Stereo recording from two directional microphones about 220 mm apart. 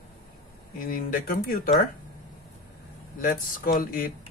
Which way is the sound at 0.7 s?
40° left (ahead or behind).